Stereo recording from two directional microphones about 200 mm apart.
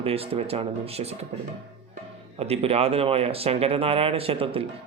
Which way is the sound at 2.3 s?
30° right (ahead or behind).